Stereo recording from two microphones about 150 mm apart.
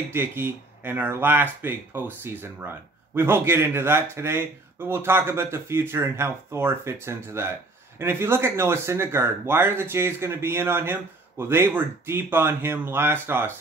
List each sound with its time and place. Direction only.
0.1 s speech: 15° right (ahead or behind)